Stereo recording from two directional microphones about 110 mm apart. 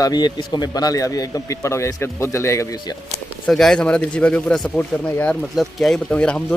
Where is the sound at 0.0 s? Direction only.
40° left (ahead or behind).